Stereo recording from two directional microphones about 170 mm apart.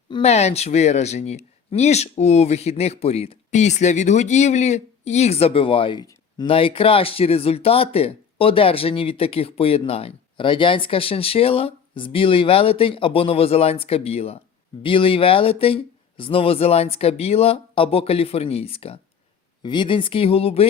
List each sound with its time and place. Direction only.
0.1 s speech: 40° left (ahead or behind)